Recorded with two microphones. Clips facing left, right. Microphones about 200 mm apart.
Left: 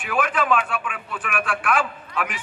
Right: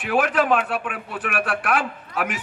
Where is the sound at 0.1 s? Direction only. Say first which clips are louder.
Right 3 dB; 40° right (ahead or behind).